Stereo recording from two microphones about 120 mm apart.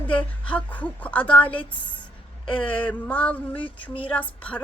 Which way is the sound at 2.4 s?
45° left (ahead or behind).